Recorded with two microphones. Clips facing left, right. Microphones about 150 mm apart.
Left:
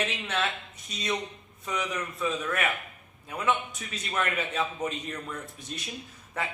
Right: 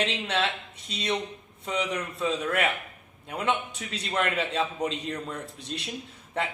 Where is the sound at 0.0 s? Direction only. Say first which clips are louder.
Right 3 dB; 30° right (ahead or behind).